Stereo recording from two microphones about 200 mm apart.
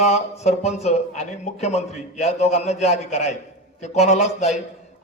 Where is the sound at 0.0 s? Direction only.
35° left (ahead or behind).